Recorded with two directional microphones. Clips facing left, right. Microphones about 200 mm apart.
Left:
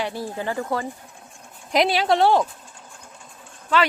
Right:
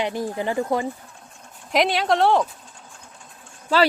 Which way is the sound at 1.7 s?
Centre (ahead or behind).